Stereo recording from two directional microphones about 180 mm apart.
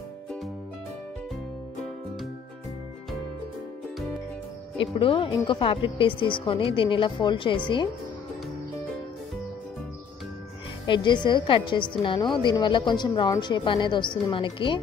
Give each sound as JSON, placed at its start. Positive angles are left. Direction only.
{"t": 4.9, "sound": "a woman's voice", "side_deg": 30}
{"t": 10.9, "sound": "a woman's voice", "side_deg": 25}